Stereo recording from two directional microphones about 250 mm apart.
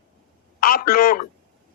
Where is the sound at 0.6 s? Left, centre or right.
Left.